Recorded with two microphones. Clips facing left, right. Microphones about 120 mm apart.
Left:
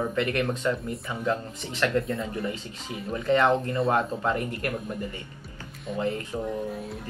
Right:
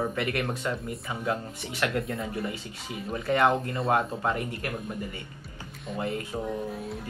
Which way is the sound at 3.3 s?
15° right (ahead or behind).